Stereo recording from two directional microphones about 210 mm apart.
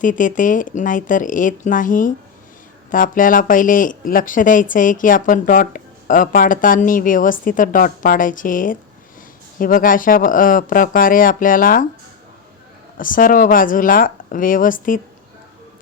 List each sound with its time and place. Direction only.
0.0 s speech: 40° left (ahead or behind)
13.0 s speech: 40° left (ahead or behind)